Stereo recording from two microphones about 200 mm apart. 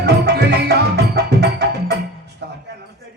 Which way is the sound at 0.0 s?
55° right (ahead or behind).